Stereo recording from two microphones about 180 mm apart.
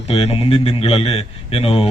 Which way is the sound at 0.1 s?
35° left (ahead or behind).